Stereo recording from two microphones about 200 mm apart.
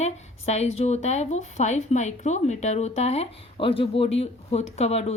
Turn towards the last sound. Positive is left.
turn(degrees=30)  # may be behind; listen again after turning